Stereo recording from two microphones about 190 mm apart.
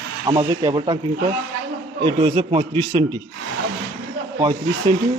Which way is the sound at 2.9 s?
20° right (ahead or behind).